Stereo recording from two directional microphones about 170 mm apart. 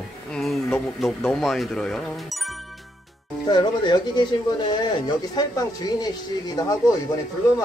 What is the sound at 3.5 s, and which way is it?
Speech, 25° left (ahead or behind).